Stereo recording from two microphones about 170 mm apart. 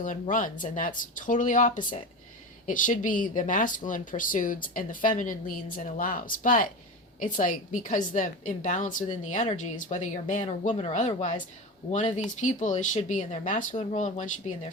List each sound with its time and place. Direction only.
0.0 s a woman's voice: 50° left (ahead or behind)
12.4 s a woman's voice: 45° left (ahead or behind)